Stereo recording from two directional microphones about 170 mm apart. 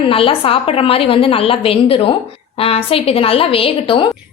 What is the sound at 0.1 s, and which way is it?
A woman's voice, 35° left (ahead or behind).